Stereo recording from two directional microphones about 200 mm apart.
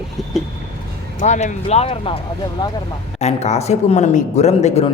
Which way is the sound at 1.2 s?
35° left (ahead or behind).